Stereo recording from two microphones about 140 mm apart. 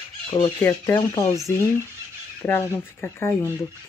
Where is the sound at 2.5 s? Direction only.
15° left (ahead or behind).